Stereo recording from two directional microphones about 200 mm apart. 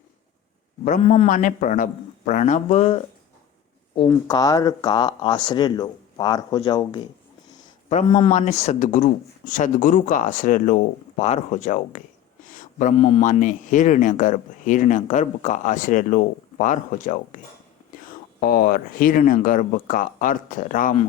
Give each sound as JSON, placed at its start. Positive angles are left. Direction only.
{"t": 0.9, "sound": "speech", "side_deg": 35}
{"t": 4.1, "sound": "speech", "side_deg": 20}
{"t": 7.9, "sound": "speech", "side_deg": 35}
{"t": 12.5, "sound": "a sound", "side_deg": 40}
{"t": 13.0, "sound": "speech", "side_deg": 30}